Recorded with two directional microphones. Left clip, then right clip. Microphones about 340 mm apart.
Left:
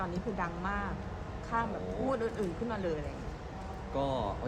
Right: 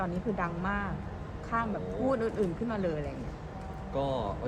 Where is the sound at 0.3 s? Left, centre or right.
Right.